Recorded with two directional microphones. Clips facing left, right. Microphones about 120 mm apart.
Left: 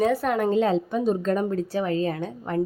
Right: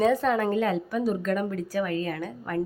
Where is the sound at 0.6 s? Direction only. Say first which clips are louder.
Left 3 dB; 25° left (ahead or behind).